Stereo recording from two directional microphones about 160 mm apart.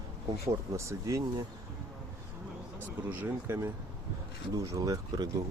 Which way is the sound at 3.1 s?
15° right (ahead or behind).